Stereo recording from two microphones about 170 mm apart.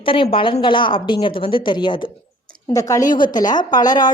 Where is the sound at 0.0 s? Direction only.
30° left (ahead or behind).